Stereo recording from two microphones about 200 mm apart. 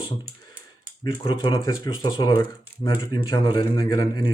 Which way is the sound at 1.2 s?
25° left (ahead or behind).